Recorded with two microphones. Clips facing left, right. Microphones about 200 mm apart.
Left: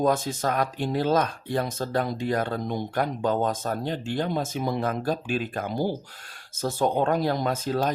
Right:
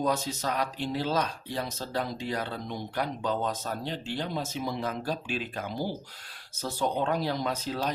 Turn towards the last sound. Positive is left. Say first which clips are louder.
# left 5 dB
turn(degrees=50)  # may be behind; listen again after turning